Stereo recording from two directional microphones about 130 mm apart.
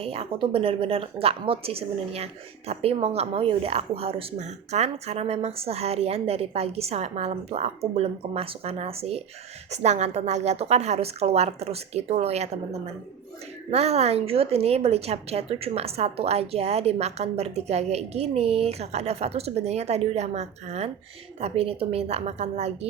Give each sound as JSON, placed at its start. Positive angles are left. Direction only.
{"t": 0.0, "sound": "a woman's voice", "side_deg": -45}